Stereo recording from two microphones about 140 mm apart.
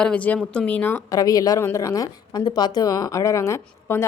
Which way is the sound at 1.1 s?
25° left (ahead or behind).